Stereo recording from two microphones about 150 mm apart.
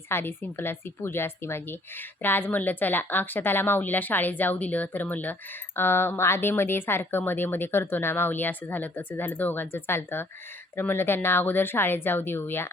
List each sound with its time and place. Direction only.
0.1 s a woman's voice: 15° left (ahead or behind)